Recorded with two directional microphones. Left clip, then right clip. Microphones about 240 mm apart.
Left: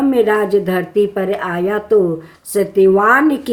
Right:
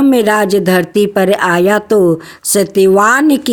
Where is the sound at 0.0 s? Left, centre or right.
Right.